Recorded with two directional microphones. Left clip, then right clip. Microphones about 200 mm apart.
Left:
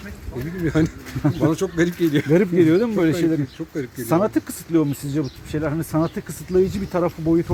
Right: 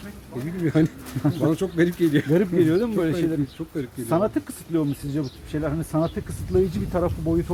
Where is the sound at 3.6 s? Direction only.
5° right (ahead or behind).